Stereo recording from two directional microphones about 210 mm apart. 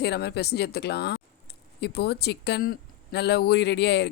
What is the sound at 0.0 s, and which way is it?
Speech, 55° left (ahead or behind).